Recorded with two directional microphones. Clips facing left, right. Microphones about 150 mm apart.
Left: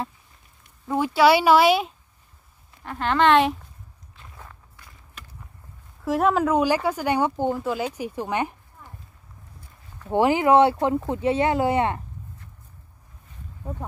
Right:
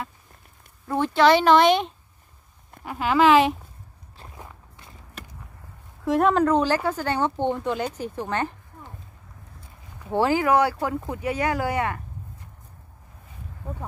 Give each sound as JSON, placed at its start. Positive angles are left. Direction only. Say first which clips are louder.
{"t": 0.8, "sound": "speech", "louder": "even", "side_deg": 10}
{"t": 2.8, "sound": "speech", "louder": "right 1 dB", "side_deg": -5}
{"t": 4.4, "sound": "walk", "louder": "right 1 dB", "side_deg": -25}
{"t": 6.0, "sound": "speech", "louder": "right 1 dB", "side_deg": 0}
{"t": 10.1, "sound": "speech", "louder": "left 3 dB", "side_deg": 20}